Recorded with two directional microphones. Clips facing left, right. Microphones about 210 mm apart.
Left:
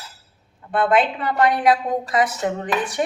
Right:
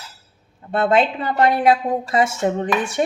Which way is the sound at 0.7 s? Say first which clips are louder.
Right 1 dB; 25° right (ahead or behind).